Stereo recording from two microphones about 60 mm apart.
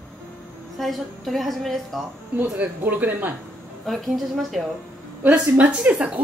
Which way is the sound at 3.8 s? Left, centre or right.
Centre.